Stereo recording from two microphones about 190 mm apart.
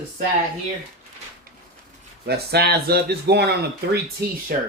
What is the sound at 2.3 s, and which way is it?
Speech, 55° right (ahead or behind).